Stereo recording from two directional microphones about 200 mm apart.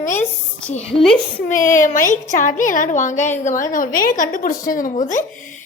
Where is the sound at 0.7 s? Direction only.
30° left (ahead or behind).